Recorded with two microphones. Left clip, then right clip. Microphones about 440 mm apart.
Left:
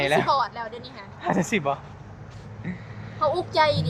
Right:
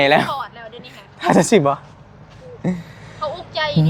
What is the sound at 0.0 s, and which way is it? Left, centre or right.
Speech, right.